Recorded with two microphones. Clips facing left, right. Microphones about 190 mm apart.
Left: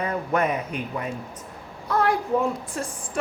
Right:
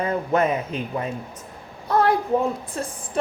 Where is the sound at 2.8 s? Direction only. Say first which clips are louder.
Right 1 dB; 30° right (ahead or behind).